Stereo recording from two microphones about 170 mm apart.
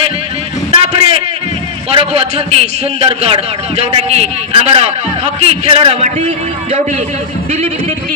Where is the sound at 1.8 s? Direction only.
35° right (ahead or behind).